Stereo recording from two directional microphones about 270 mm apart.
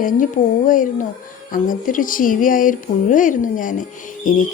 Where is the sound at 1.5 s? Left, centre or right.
Left.